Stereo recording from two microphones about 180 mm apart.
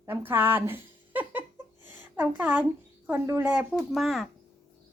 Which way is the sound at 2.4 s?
10° right (ahead or behind).